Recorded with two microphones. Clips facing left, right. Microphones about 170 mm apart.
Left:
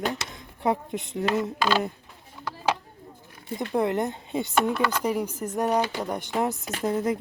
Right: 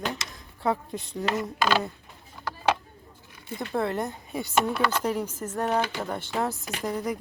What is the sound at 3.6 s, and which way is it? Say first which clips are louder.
Speech: left 3 dB; 15° left (ahead or behind).